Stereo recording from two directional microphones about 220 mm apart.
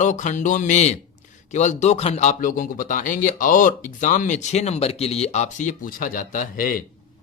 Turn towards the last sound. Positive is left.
turn(degrees=40)  # may be behind; listen again after turning